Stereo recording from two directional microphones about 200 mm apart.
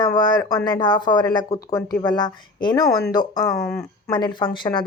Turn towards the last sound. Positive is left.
turn(degrees=25)  # may be behind; listen again after turning